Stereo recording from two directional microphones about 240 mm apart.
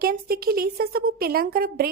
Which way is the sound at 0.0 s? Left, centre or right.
Right.